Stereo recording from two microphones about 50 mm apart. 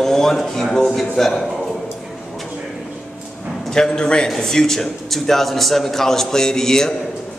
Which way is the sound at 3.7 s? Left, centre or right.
Centre.